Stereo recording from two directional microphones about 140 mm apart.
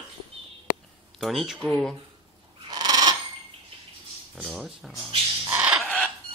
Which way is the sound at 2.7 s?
30° right (ahead or behind).